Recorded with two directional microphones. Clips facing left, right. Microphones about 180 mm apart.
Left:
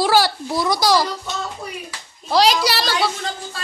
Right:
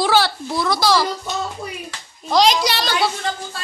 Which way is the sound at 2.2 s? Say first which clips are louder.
Even; 5° left (ahead or behind).